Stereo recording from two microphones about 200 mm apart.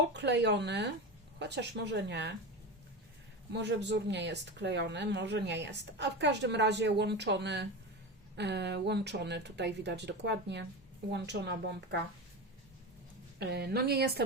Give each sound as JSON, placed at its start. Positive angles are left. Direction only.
{"t": 0.1, "sound": "speech", "side_deg": -60}
{"t": 3.5, "sound": "speech", "side_deg": -60}
{"t": 13.4, "sound": "a woman's voice", "side_deg": -55}